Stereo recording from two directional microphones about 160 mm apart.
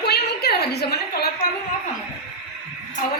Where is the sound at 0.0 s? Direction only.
90° left.